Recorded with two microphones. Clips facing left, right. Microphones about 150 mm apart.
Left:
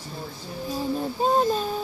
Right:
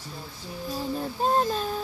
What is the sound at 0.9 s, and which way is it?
Speech, 5° left (ahead or behind).